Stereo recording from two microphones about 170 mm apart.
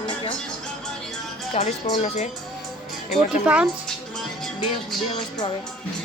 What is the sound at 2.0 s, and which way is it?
Speech, 45° left (ahead or behind).